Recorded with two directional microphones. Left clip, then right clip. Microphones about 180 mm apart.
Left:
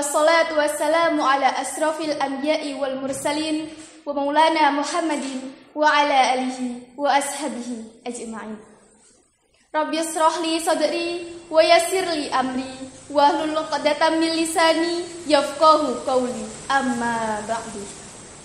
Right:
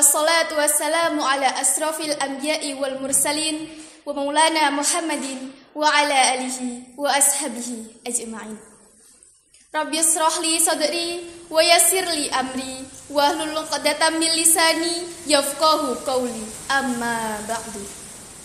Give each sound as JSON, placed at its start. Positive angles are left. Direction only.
{"t": 0.1, "sound": "a woman's voice", "side_deg": -35}
{"t": 9.7, "sound": "a woman's voice", "side_deg": -35}